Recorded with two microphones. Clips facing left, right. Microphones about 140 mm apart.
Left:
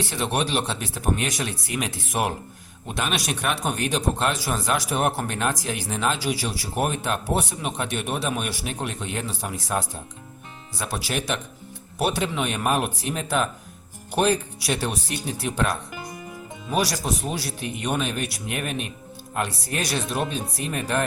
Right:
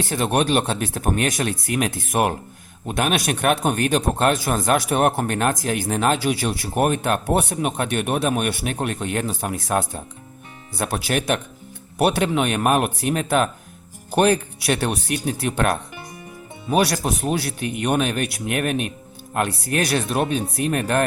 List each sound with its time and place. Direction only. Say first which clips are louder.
0.0 s a man's voice: right 5 dB; 50° right (ahead or behind)